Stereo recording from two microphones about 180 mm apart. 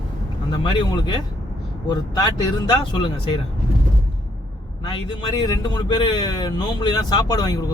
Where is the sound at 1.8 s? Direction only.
20° left (ahead or behind).